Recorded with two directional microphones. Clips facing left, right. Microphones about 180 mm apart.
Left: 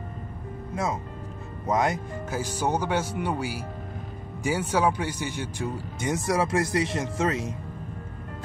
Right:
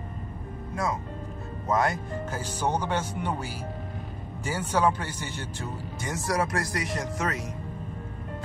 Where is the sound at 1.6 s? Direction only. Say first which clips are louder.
Left 1 dB; 20° left (ahead or behind).